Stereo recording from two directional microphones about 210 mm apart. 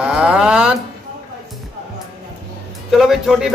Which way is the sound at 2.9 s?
Centre (ahead or behind).